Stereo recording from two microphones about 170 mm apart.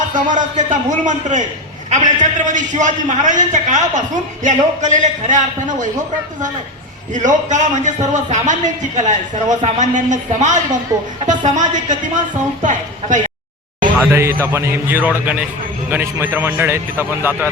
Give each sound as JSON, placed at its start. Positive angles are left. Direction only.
{"t": 0.1, "sound": "a man's voice", "side_deg": -50}
{"t": 7.1, "sound": "a man's voice", "side_deg": -45}
{"t": 14.1, "sound": "a man's voice", "side_deg": -15}